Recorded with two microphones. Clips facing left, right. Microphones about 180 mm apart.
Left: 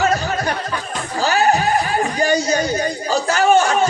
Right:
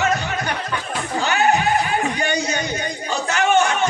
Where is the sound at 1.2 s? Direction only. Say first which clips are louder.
Left 3 dB; 35° left (ahead or behind).